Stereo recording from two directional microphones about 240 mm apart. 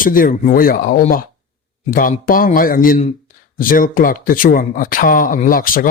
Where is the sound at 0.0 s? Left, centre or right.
Left.